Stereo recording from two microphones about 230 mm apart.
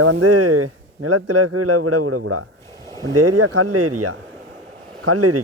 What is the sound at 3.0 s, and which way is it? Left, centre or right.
Speech, right.